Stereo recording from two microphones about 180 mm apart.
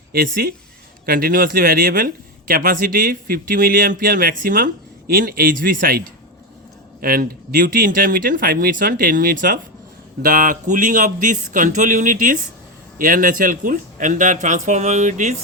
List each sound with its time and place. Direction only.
0.1 s speech: 55° right (ahead or behind)
7.0 s speech: 55° right (ahead or behind)